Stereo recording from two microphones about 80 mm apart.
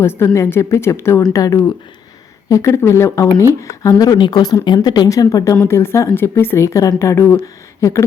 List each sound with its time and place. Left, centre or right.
0.0 s a woman's voice: left
1.3 s a woman's voice: left
5.6 s a woman's voice: left